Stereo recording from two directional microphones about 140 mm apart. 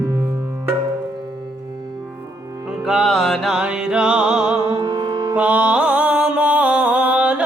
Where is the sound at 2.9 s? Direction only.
Centre (ahead or behind).